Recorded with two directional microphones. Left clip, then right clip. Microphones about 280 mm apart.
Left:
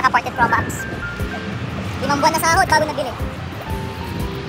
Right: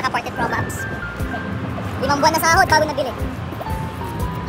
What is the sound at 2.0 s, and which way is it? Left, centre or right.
Speech, centre.